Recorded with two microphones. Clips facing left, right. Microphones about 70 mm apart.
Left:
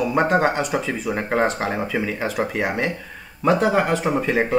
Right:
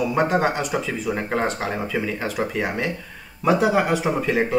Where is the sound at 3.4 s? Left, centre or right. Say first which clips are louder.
Left 1 dB; centre.